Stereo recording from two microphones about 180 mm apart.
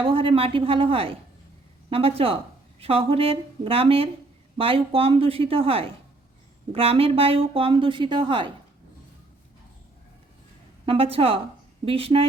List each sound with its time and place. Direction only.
0.0 s a woman's voice: 30° right (ahead or behind)
10.8 s a woman's voice: 30° right (ahead or behind)